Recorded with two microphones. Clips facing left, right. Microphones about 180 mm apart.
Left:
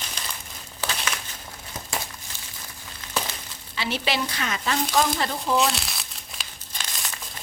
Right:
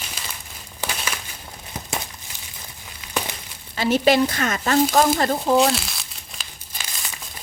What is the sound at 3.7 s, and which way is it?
A woman's voice, 45° right (ahead or behind).